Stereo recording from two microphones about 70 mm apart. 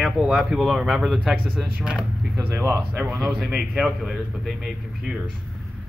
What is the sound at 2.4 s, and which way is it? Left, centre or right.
Speech, right.